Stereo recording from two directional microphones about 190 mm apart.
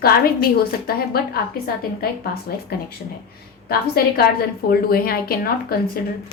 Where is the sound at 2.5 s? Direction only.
50° left (ahead or behind).